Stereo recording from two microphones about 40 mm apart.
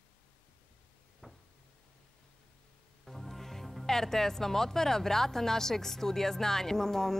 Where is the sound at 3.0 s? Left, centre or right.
Centre.